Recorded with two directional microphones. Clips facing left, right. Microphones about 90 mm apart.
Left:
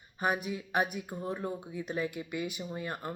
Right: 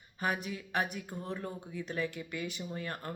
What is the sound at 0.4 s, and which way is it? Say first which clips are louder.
Speech: left 3 dB; 20° left (ahead or behind).